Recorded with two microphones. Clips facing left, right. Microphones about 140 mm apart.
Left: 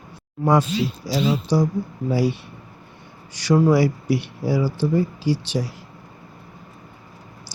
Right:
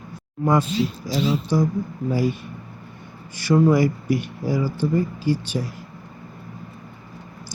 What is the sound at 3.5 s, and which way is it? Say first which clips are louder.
Speech: even; 10° left (ahead or behind).